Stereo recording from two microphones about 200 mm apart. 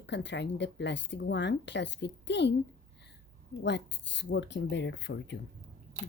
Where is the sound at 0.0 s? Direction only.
60° left (ahead or behind).